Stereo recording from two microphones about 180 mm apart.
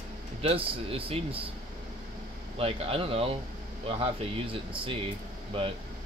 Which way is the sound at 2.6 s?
30° right (ahead or behind).